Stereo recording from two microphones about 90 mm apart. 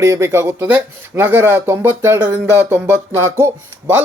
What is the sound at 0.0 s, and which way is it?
Speech, 35° right (ahead or behind).